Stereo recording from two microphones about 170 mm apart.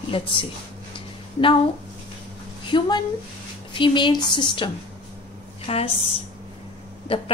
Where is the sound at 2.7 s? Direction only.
25° left (ahead or behind).